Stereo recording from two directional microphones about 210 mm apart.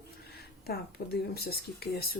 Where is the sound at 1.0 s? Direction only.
45° left (ahead or behind).